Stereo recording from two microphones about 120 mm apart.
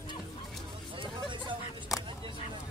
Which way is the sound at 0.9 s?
40° right (ahead or behind).